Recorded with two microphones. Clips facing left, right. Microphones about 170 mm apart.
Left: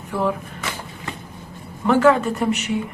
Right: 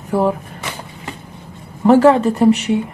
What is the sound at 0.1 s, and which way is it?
Speech, 35° right (ahead or behind).